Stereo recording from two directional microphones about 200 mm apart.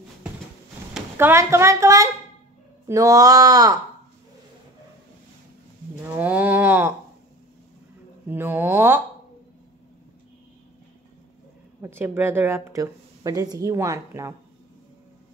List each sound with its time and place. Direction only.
1.1 s a woman's voice: 15° right (ahead or behind)
6.0 s a sound: 10° right (ahead or behind)
8.3 s a woman's voice: 10° right (ahead or behind)
11.8 s a woman's voice: 10° right (ahead or behind)